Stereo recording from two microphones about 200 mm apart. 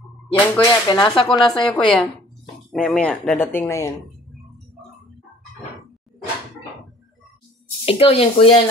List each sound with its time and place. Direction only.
0.3 s speech: 20° left (ahead or behind)
1.3 s a woman's voice: centre (ahead or behind)
7.8 s speech: 30° left (ahead or behind)